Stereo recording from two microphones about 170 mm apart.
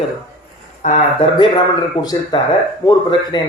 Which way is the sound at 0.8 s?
45° left (ahead or behind).